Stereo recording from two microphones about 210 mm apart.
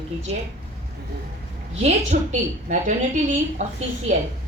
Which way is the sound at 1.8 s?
30° right (ahead or behind).